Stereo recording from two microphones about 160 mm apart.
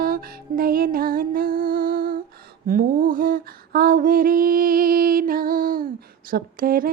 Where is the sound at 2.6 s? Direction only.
60° right (ahead or behind).